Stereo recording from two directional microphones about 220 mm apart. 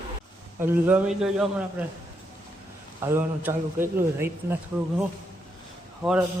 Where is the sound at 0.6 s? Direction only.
10° right (ahead or behind).